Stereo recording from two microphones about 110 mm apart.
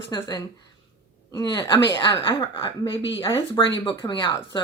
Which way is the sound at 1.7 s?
45° left (ahead or behind).